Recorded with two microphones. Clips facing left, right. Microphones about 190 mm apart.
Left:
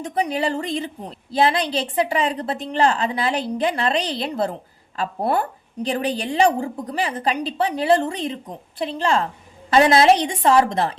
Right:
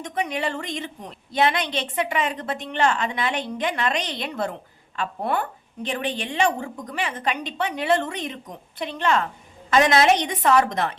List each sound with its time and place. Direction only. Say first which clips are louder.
0.0 s a woman's voice: left 4 dB; 35° left (ahead or behind)